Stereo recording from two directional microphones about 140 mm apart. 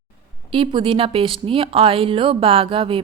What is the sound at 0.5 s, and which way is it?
Speech, 35° right (ahead or behind).